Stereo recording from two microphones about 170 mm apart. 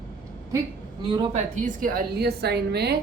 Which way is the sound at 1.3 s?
50° right (ahead or behind).